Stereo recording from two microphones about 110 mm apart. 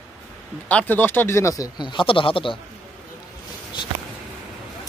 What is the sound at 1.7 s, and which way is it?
Speech, 45° left (ahead or behind).